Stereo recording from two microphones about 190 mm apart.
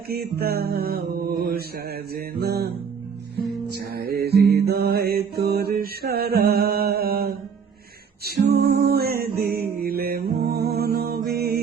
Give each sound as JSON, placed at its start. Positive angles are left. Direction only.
{"t": 0.1, "sound": "mantra", "side_deg": -55}
{"t": 3.7, "sound": "music", "side_deg": -55}